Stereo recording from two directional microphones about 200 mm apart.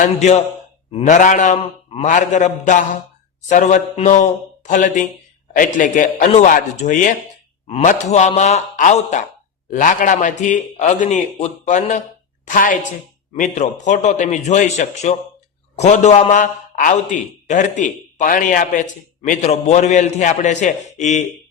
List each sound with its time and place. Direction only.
0.0 s a man's voice: 35° left (ahead or behind)